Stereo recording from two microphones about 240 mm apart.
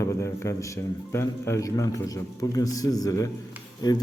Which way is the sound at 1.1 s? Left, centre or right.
Centre.